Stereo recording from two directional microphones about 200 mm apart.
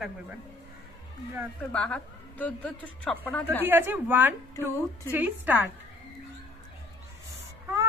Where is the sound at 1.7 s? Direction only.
5° left (ahead or behind).